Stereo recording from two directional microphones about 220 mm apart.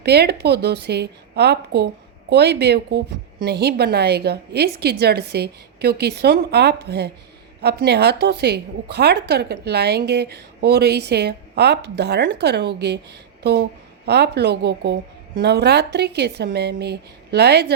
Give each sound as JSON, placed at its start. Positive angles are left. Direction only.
{"t": 0.0, "sound": "a woman's voice", "side_deg": -45}